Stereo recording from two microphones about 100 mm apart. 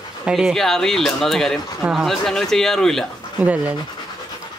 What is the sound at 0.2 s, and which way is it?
Speech, 5° right (ahead or behind).